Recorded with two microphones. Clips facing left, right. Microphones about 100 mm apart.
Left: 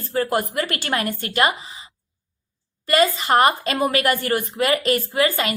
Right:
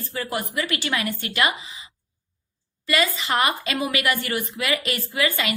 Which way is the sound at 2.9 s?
40° left (ahead or behind).